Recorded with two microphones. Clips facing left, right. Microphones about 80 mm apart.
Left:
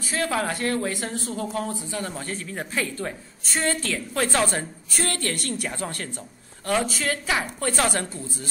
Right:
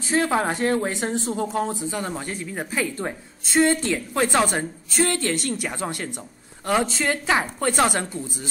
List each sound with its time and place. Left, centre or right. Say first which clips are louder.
0.1 s speech: right 4 dB; right